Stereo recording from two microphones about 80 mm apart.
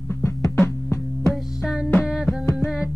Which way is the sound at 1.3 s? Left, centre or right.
Centre.